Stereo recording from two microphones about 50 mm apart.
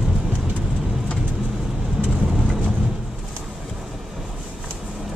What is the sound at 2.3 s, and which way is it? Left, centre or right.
Vehicle, centre.